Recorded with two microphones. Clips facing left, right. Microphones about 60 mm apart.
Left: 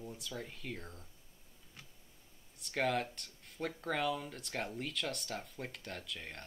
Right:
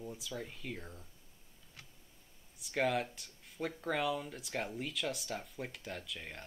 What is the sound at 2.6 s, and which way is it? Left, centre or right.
Speech, centre.